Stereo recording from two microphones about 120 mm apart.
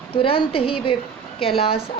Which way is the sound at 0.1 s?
50° left (ahead or behind).